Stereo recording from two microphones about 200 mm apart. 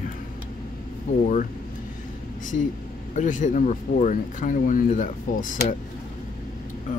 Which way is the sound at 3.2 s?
40° left (ahead or behind).